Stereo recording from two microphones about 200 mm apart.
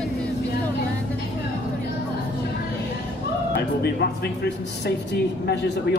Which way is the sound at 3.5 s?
55° left (ahead or behind).